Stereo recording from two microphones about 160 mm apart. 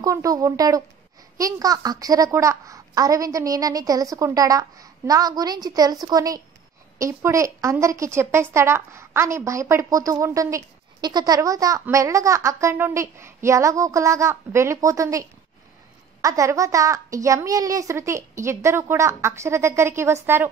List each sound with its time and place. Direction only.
0.0 s a woman's voice: 20° right (ahead or behind)